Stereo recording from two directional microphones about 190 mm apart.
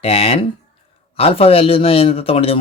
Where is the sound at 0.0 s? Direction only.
30° left (ahead or behind).